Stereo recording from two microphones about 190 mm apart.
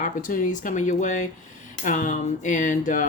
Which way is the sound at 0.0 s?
45° left (ahead or behind).